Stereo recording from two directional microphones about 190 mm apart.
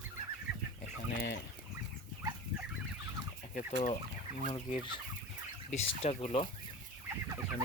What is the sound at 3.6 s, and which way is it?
Speech, 35° left (ahead or behind).